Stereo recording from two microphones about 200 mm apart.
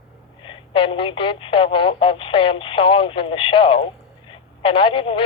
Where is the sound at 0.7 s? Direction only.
25° left (ahead or behind).